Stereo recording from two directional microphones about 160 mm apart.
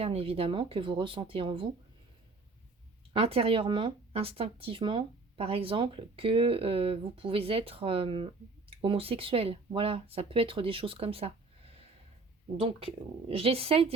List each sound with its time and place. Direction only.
0.0 s speech: 35° right (ahead or behind)
3.1 s speech: 35° right (ahead or behind)
13.2 s speech: 35° right (ahead or behind)